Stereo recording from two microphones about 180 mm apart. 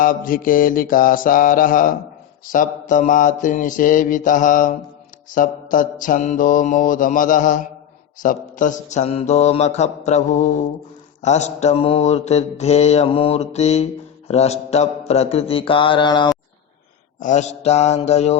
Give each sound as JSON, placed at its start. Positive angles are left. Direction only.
{"t": 0.0, "sound": "mantra", "side_deg": 50}
{"t": 17.2, "sound": "mantra", "side_deg": 45}